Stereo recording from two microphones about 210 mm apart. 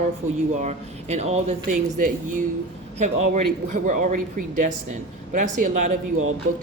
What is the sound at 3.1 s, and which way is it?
Speech, 35° right (ahead or behind).